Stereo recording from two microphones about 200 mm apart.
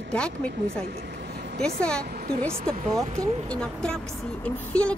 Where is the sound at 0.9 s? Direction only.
55° right (ahead or behind).